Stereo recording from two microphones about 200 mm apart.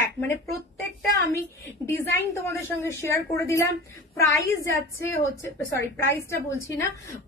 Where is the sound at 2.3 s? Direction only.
15° left (ahead or behind).